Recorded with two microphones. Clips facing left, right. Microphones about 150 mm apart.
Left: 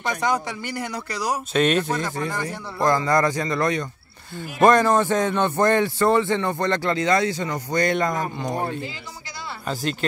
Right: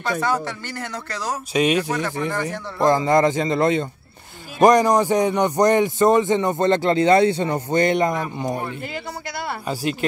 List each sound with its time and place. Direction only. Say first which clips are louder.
0.0 s speech: right 1 dB; 15° left (ahead or behind)
1.5 s speech: right 2 dB; 10° right (ahead or behind)
2.0 s speech: right 3 dB; 15° left (ahead or behind)
2.4 s speech: right 3 dB; 20° right (ahead or behind)